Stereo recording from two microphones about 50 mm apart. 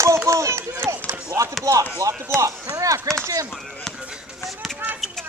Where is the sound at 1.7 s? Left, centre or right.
Right.